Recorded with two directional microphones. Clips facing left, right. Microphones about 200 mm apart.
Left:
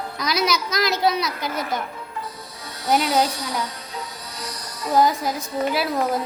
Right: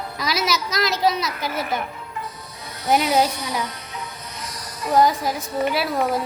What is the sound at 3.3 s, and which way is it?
Speech, 20° right (ahead or behind).